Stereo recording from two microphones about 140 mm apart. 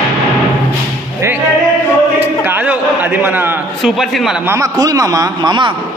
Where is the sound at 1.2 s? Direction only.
20° right (ahead or behind).